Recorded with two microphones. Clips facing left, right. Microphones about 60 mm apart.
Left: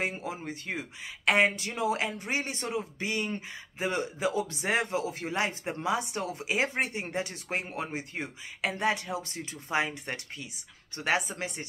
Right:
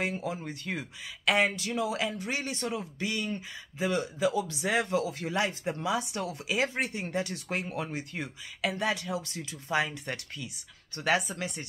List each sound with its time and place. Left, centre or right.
0.0 s speech: left